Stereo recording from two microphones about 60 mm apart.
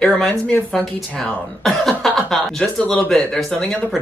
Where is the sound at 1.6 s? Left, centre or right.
Centre.